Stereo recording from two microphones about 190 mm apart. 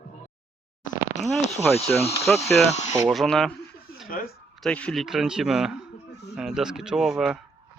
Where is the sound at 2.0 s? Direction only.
30° left (ahead or behind).